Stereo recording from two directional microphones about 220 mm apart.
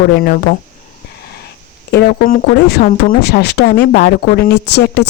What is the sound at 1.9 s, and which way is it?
Speech, 45° left (ahead or behind).